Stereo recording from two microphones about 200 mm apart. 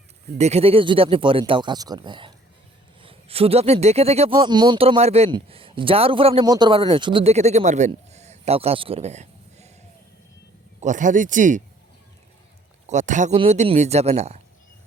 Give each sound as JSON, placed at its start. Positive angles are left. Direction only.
{"t": 0.3, "sound": "speech", "side_deg": -30}
{"t": 10.8, "sound": "speech", "side_deg": -40}
{"t": 12.9, "sound": "speech", "side_deg": -35}